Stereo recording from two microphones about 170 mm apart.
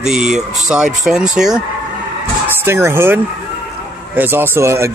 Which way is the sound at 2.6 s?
15° right (ahead or behind).